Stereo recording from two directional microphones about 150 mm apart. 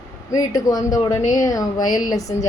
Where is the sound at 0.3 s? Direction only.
25° left (ahead or behind).